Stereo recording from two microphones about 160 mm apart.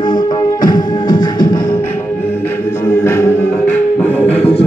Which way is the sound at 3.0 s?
15° left (ahead or behind).